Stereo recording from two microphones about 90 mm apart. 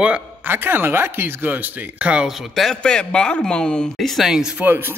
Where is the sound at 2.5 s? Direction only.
5° left (ahead or behind).